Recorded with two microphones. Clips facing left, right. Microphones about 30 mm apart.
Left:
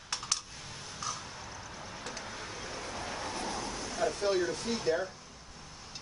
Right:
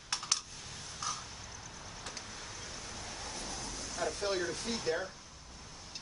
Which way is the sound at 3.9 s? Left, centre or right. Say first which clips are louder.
Left 5 dB; centre.